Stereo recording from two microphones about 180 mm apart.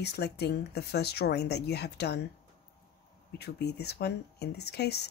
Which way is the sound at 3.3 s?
65° left (ahead or behind).